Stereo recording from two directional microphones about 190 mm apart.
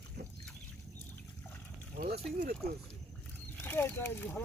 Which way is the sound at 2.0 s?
55° right (ahead or behind).